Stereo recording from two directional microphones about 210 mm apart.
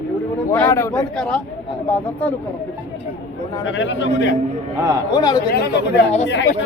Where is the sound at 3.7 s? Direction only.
60° left (ahead or behind).